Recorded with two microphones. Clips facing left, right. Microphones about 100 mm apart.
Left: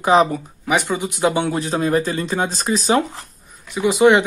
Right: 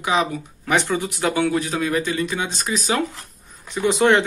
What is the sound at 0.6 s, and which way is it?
Speech, 15° left (ahead or behind).